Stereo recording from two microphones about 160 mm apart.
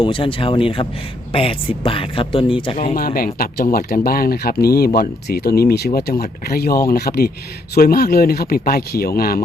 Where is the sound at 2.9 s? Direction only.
65° left (ahead or behind).